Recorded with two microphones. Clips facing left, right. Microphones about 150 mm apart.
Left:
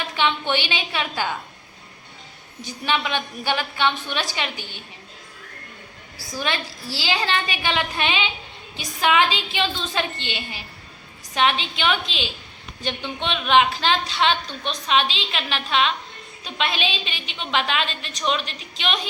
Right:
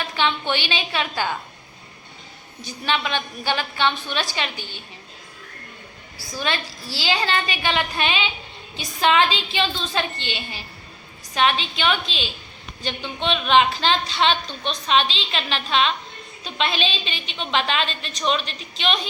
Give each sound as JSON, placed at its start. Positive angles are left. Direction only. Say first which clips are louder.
{"t": 0.2, "sound": "a woman's voice", "louder": "left 1 dB", "side_deg": 15}
{"t": 2.6, "sound": "a woman's voice", "louder": "even", "side_deg": 15}
{"t": 6.4, "sound": "a woman's voice", "louder": "right 1 dB", "side_deg": 15}
{"t": 13.5, "sound": "a woman's voice", "louder": "even", "side_deg": 10}